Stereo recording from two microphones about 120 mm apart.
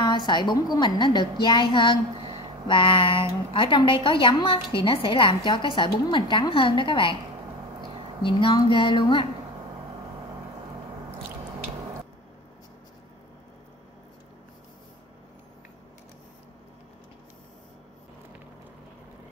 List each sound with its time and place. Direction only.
0.0 s a woman's voice: 40° left (ahead or behind)
0.7 s a sound: 40° left (ahead or behind)
2.7 s a woman's voice: 45° left (ahead or behind)
8.2 s a woman's voice: 45° left (ahead or behind)